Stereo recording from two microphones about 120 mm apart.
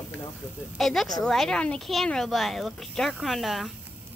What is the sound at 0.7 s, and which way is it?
Speech, centre (ahead or behind).